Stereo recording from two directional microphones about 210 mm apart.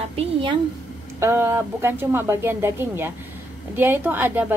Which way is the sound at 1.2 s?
10° right (ahead or behind).